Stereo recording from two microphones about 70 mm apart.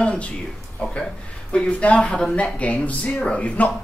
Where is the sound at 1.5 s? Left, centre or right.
Centre.